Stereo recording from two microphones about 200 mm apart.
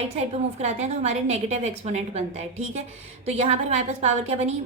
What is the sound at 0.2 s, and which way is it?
A woman's voice, 35° right (ahead or behind).